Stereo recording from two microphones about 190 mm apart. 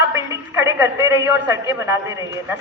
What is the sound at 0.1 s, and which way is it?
A man's voice, 15° right (ahead or behind).